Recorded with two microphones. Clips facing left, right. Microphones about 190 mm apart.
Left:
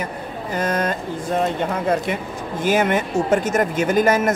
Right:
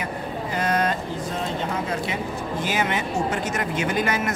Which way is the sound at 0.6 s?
45° left (ahead or behind).